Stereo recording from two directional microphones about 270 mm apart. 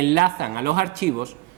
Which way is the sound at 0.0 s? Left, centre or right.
Right.